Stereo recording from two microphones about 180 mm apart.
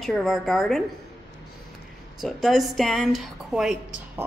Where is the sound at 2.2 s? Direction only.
Centre (ahead or behind).